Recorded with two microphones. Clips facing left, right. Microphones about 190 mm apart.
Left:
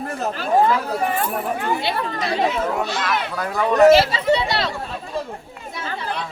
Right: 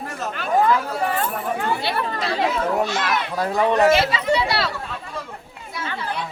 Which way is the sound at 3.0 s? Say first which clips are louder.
Right 1 dB; 30° right (ahead or behind).